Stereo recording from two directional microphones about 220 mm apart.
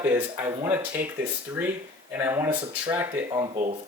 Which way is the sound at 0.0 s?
10° right (ahead or behind).